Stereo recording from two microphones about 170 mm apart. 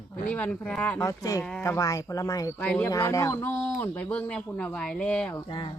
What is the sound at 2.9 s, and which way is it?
Speech, 20° left (ahead or behind).